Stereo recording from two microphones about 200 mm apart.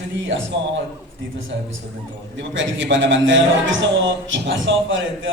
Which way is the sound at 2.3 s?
65° right (ahead or behind).